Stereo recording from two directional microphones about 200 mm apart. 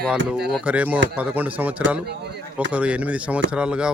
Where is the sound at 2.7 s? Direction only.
5° right (ahead or behind).